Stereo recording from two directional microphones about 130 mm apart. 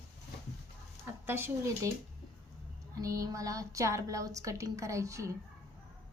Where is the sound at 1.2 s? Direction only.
15° right (ahead or behind).